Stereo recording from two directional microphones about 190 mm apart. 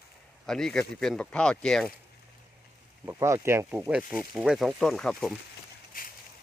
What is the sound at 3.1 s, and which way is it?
Speech, 15° right (ahead or behind).